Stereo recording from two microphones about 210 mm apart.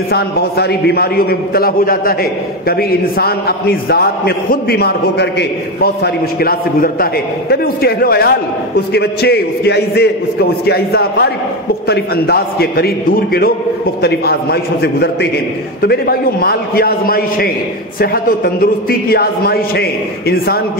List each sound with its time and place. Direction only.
0.1 s a man's voice: 50° left (ahead or behind)